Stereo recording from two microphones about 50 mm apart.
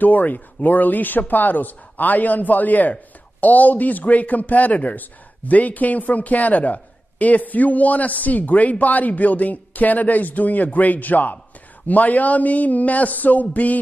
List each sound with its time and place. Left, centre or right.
0.0 s a man's voice: left